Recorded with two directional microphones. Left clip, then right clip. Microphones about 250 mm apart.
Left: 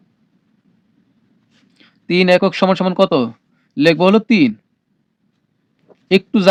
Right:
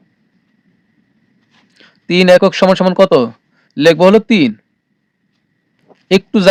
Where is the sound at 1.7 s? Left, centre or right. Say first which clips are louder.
Right 3 dB; right.